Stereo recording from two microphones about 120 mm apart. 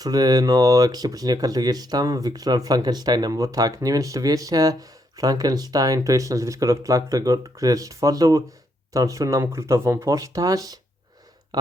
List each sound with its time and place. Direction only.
0.0 s speech: 35° right (ahead or behind)